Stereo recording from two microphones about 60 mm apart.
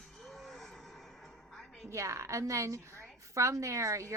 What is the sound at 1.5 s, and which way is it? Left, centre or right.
Music, centre.